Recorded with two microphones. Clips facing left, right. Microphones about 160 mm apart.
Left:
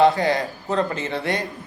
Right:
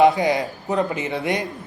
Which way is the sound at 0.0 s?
15° right (ahead or behind).